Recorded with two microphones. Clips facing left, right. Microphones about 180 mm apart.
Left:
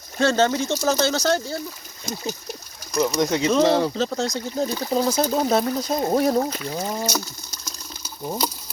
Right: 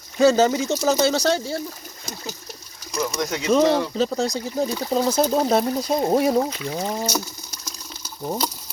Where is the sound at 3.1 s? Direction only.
25° left (ahead or behind).